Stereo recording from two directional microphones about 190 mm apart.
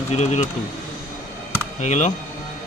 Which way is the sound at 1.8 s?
40° left (ahead or behind).